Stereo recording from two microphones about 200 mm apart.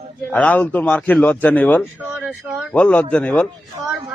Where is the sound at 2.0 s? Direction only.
10° right (ahead or behind).